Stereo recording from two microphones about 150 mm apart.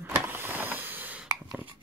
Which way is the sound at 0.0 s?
15° right (ahead or behind).